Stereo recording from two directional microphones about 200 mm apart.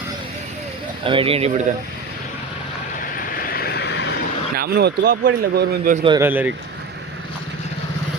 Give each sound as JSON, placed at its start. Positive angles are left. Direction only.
{"t": 1.0, "sound": "speech", "side_deg": -25}
{"t": 3.0, "sound": "vehicle", "side_deg": 45}
{"t": 4.5, "sound": "speech", "side_deg": -50}
{"t": 6.1, "sound": "speech", "side_deg": -10}